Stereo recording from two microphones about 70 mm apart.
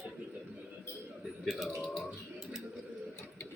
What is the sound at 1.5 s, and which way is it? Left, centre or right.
Speech, centre.